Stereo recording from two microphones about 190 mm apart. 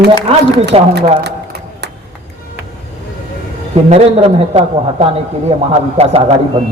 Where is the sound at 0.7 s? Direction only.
30° right (ahead or behind).